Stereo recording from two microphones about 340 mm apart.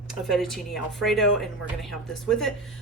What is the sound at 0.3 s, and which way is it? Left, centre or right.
A woman's voice, centre.